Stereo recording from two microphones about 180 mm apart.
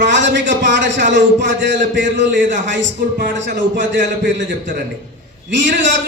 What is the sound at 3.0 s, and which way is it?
Speech, 50° right (ahead or behind).